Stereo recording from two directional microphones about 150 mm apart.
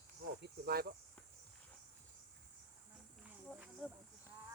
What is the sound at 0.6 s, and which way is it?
Speech, 90° right.